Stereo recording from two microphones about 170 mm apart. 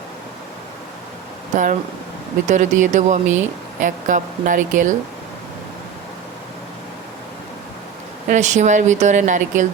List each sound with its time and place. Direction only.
1.5 s speech: 45° right (ahead or behind)
8.3 s speech: 45° right (ahead or behind)